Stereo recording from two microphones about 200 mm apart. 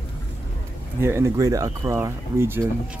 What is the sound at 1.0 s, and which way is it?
Speech, 15° right (ahead or behind).